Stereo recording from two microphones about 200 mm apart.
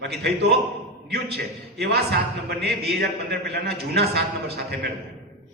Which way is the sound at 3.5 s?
55° right (ahead or behind).